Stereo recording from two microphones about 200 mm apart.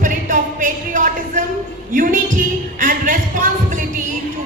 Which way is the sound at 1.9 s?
45° right (ahead or behind).